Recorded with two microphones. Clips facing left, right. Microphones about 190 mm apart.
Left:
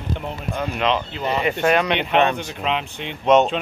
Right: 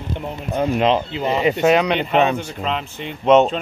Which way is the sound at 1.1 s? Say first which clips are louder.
Right 3 dB; 20° right (ahead or behind).